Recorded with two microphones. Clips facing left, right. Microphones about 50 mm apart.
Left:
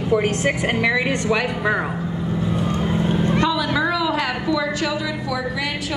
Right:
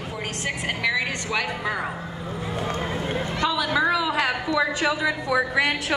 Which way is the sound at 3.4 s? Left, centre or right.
Centre.